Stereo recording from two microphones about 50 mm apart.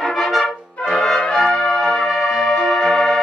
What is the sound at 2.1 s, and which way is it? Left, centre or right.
Music, centre.